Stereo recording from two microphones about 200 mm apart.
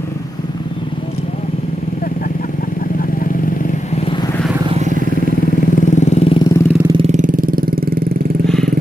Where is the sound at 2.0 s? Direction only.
45° left (ahead or behind); by 4.3 s 25° left (ahead or behind).